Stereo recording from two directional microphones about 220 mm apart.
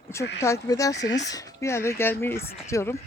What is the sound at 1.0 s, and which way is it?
Speech, 50° left (ahead or behind).